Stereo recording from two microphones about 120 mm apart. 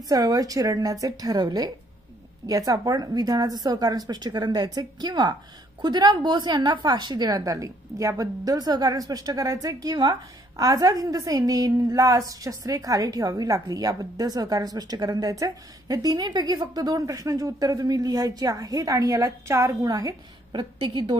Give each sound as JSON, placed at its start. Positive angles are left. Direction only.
{"t": 0.1, "sound": "a woman's voice", "side_deg": -30}
{"t": 20.8, "sound": "a woman's voice", "side_deg": -45}